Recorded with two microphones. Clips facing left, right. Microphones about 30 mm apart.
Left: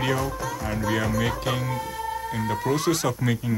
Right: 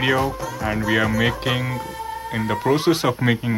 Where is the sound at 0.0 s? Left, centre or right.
Right.